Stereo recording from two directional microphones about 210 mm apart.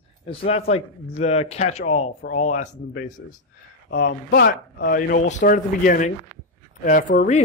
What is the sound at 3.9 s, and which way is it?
Speech, 50° left (ahead or behind).